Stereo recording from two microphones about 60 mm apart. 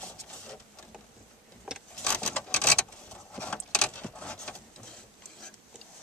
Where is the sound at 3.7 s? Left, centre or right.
Centre.